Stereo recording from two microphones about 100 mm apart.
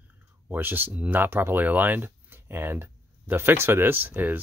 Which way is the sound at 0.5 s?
20° right (ahead or behind).